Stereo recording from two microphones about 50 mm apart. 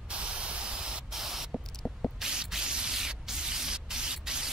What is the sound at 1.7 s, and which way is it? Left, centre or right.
Spray, centre.